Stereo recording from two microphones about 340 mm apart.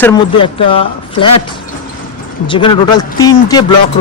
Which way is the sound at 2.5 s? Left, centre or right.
Centre.